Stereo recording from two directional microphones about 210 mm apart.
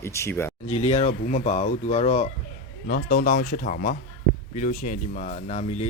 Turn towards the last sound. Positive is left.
turn(degrees=35)  # may be behind; listen again after turning